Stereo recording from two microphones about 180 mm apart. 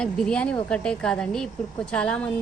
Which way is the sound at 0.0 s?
5° left (ahead or behind).